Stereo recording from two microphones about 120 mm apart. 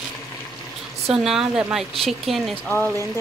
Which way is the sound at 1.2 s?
5° right (ahead or behind).